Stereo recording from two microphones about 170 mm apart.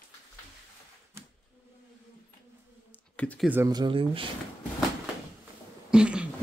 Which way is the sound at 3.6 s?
25° right (ahead or behind).